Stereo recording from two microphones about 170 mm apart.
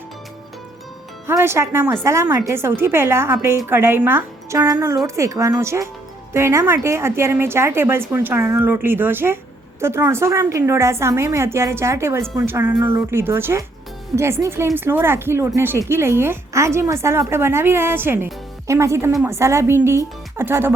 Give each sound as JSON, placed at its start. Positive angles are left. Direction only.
{"t": 1.3, "sound": "a woman's voice", "side_deg": -15}